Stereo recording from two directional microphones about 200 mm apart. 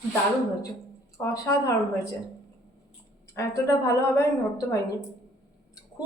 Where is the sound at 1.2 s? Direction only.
15° left (ahead or behind).